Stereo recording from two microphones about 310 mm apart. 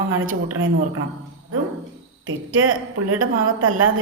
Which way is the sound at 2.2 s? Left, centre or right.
Right.